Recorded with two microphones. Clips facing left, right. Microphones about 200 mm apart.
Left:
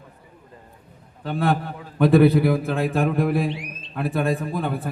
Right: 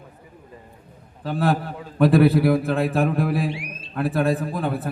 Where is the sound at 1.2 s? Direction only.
Centre (ahead or behind).